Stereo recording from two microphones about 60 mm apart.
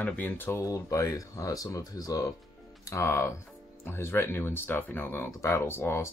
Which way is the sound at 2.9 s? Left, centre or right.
Left.